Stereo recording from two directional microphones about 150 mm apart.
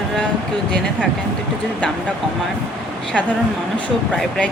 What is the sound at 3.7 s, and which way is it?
Speech, 5° left (ahead or behind).